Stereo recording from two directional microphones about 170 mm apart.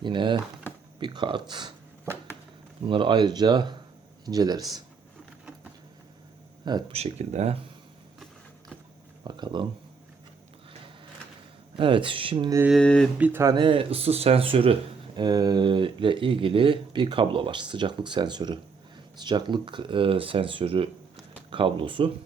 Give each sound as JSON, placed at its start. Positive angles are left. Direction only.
{"t": 0.0, "sound": "speech", "side_deg": -25}
{"t": 2.8, "sound": "speech", "side_deg": -30}
{"t": 6.7, "sound": "speech", "side_deg": -25}
{"t": 6.9, "sound": "speech", "side_deg": -40}
{"t": 9.2, "sound": "speech", "side_deg": -25}
{"t": 11.8, "sound": "speech", "side_deg": -30}
{"t": 12.7, "sound": "speech", "side_deg": 5}
{"t": 13.1, "sound": "speech", "side_deg": -10}